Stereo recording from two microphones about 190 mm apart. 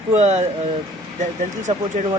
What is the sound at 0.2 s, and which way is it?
Speech, 35° right (ahead or behind).